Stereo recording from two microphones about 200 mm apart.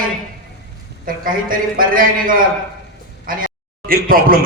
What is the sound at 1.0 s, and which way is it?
A man's voice, 45° right (ahead or behind).